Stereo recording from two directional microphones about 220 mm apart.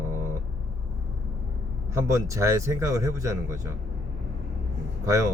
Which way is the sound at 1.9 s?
15° right (ahead or behind).